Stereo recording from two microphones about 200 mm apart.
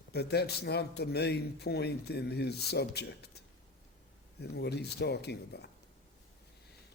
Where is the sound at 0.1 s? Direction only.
55° left (ahead or behind).